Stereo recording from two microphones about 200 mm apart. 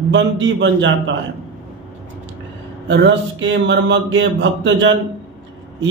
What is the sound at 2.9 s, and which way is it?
A man's voice, 65° right (ahead or behind).